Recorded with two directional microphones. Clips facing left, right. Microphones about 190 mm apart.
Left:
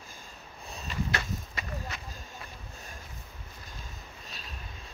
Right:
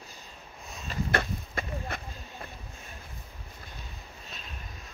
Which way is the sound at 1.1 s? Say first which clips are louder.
Right 5 dB; 50° right (ahead or behind).